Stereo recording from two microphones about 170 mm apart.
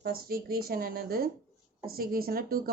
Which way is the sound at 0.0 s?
60° right (ahead or behind).